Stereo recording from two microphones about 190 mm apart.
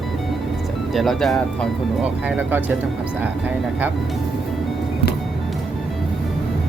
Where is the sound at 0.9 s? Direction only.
Centre (ahead or behind).